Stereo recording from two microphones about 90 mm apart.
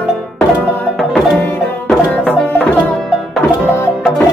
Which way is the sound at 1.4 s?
15° left (ahead or behind).